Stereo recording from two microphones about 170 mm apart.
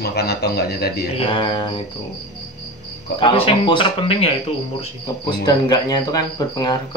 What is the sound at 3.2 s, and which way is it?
Speech, 30° left (ahead or behind).